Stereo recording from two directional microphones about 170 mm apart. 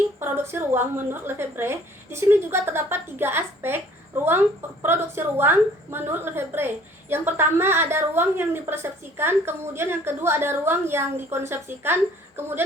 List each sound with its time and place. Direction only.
0.2 s a woman's voice: 15° right (ahead or behind)
4.8 s a woman's voice: 15° right (ahead or behind)